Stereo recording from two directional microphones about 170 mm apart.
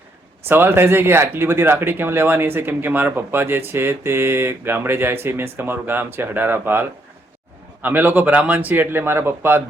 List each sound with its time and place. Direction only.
0.4 s speech: 15° right (ahead or behind)